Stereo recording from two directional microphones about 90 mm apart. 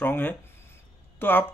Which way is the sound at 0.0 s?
20° left (ahead or behind).